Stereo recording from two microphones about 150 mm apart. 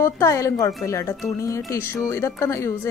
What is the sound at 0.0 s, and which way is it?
A woman's voice, 20° left (ahead or behind).